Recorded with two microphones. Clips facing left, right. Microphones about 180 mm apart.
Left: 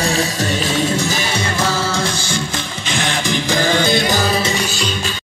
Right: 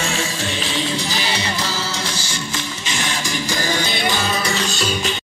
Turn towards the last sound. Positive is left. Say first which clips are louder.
# left 1 dB
turn(degrees=0)  # may be behind; listen again after turning